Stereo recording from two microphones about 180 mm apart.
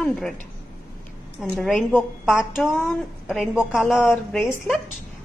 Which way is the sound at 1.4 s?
Centre (ahead or behind).